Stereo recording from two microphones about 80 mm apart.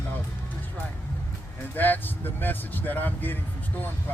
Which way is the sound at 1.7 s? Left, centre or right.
Left.